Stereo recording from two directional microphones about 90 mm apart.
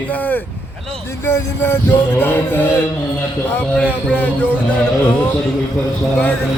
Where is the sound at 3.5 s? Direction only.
15° left (ahead or behind).